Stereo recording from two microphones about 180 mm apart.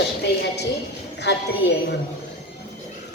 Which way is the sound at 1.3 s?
75° left (ahead or behind).